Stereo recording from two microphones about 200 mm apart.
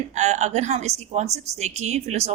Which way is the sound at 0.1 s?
35° right (ahead or behind).